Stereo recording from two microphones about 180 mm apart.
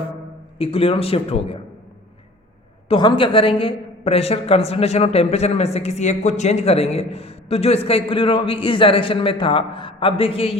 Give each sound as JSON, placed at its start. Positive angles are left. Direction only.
{"t": 0.6, "sound": "a woman's voice", "side_deg": 30}
{"t": 2.9, "sound": "a woman's voice", "side_deg": 25}